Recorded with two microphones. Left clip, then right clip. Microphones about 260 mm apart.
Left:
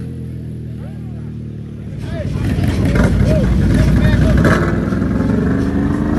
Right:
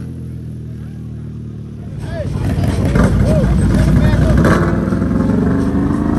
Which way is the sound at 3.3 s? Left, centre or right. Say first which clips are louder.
Right 1 dB; right.